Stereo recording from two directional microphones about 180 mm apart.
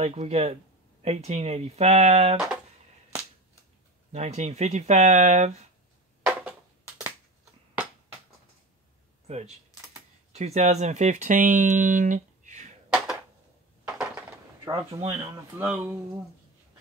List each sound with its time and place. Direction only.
0.0 s speech: 35° right (ahead or behind)
2.3 s a sound: 5° right (ahead or behind)
4.1 s speech: 35° right (ahead or behind)
10.3 s speech: 40° right (ahead or behind)
12.9 s a sound: 5° right (ahead or behind)
15.6 s speech: 10° right (ahead or behind)